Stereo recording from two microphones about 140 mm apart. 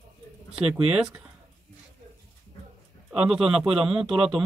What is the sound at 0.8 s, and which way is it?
Speech, 5° right (ahead or behind).